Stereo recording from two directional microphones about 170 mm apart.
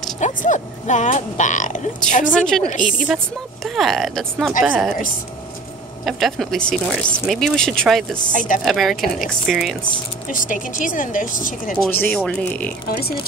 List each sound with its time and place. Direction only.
0.2 s speech: 45° left (ahead or behind)
2.3 s a woman's voice: 5° left (ahead or behind)
6.0 s speech: centre (ahead or behind)
8.3 s speech: 50° left (ahead or behind)
8.6 s speech: centre (ahead or behind)
10.3 s speech: 50° left (ahead or behind)
12.0 s speech: 10° left (ahead or behind)